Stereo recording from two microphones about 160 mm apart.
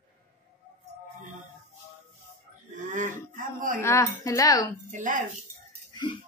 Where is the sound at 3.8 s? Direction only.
20° left (ahead or behind).